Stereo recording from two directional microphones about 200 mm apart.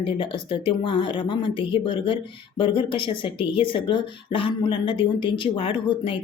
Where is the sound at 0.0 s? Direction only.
25° left (ahead or behind).